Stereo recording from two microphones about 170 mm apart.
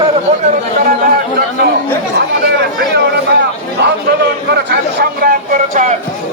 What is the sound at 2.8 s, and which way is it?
Speech, 75° right (ahead or behind).